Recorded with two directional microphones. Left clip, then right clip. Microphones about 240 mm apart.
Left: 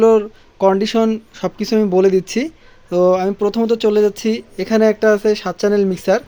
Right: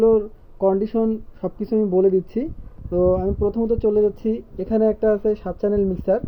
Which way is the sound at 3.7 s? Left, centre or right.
Centre.